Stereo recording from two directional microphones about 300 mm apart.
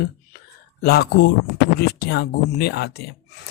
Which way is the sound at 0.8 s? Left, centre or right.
Left.